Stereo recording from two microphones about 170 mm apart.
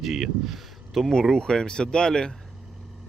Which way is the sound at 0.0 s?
Centre (ahead or behind).